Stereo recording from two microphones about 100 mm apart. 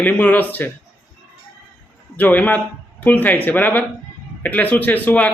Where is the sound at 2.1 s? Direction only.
15° left (ahead or behind).